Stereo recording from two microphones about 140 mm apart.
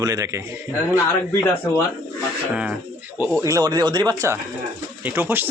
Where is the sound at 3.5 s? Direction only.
25° right (ahead or behind).